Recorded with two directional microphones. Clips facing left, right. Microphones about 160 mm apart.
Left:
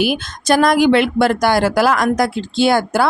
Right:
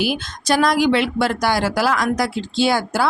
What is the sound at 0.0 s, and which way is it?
Speech, 55° left (ahead or behind).